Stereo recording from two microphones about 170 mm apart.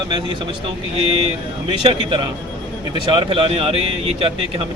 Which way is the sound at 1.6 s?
30° right (ahead or behind).